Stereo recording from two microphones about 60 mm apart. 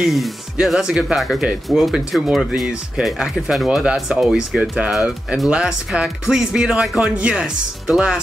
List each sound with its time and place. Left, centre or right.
0.0 s speech: centre
4.6 s speech: centre
7.2 s speech: centre